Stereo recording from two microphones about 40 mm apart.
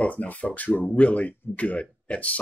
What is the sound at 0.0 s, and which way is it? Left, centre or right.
Speech, left.